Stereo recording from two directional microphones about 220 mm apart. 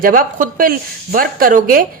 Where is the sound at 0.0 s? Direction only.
40° right (ahead or behind).